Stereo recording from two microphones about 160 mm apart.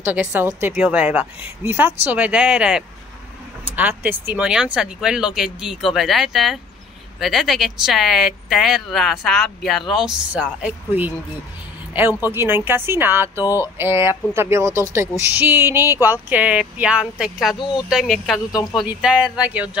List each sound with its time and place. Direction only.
0.0 s speech: 10° right (ahead or behind)
18.5 s speech: 20° left (ahead or behind)
18.8 s speech: 5° right (ahead or behind)